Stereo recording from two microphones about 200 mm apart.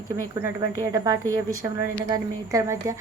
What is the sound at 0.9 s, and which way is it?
A woman's voice, 15° right (ahead or behind).